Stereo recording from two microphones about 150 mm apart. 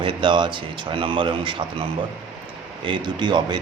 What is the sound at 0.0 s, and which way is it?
Speech, 35° right (ahead or behind).